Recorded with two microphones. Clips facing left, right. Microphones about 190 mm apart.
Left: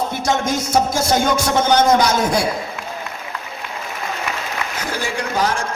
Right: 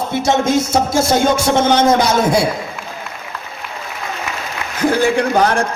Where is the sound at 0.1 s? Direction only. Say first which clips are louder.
Right 5 dB; 25° right (ahead or behind).